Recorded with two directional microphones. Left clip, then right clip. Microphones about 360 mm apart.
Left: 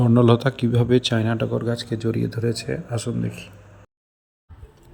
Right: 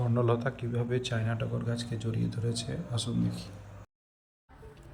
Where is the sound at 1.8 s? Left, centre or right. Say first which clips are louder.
Left 12 dB; centre.